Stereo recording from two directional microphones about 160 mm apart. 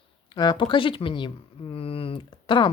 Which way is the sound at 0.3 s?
25° left (ahead or behind).